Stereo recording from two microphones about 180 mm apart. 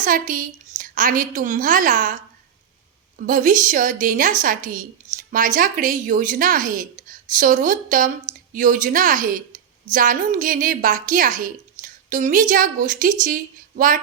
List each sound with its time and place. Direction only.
0.0 s a woman's voice: 50° right (ahead or behind)
3.2 s a woman's voice: 50° right (ahead or behind)